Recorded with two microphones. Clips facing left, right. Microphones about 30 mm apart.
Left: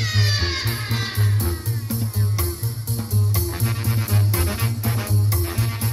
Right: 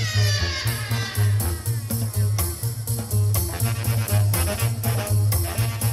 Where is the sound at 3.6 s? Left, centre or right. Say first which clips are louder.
Left 2 dB; centre.